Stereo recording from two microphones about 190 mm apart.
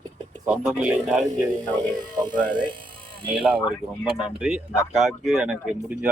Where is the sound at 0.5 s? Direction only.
5° right (ahead or behind).